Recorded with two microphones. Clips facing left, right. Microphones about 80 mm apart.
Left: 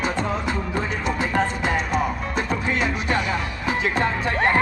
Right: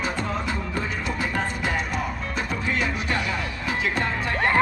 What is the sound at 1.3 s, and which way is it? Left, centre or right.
Music, left.